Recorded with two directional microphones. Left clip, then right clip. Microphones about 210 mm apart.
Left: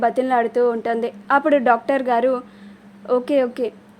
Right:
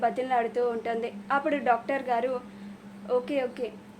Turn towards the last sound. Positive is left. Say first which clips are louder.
# left 10 dB
turn(degrees=50)  # may be behind; listen again after turning